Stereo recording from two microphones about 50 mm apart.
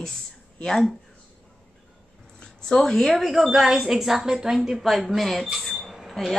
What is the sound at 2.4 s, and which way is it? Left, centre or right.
Speech, centre.